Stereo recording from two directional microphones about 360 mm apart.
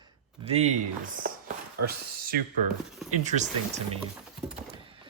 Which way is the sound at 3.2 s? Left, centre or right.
Centre.